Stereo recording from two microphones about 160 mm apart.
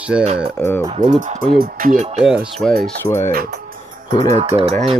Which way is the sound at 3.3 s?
70° right (ahead or behind).